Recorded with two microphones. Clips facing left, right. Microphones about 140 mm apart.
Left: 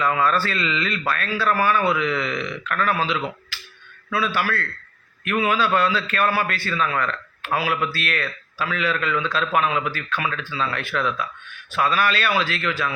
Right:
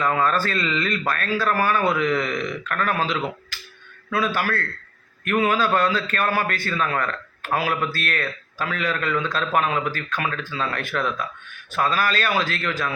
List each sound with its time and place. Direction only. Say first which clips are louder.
0.0 s a man's voice: even; 40° right (ahead or behind)
3.5 s a sound: left 1 dB; 45° right (ahead or behind)
4.1 s a man's voice: even; 45° right (ahead or behind)